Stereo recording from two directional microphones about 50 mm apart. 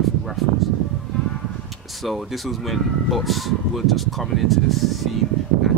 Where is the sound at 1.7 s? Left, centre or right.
Centre.